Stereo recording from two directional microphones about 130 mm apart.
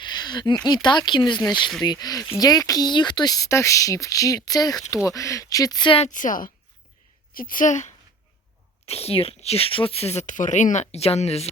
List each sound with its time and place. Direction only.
0.0 s speech: 35° left (ahead or behind)
6.1 s a woman's voice: 85° left; by 7.9 s 70° left (ahead or behind)
8.9 s speech: 50° left (ahead or behind)